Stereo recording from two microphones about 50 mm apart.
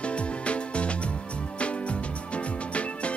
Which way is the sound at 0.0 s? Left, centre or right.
Left.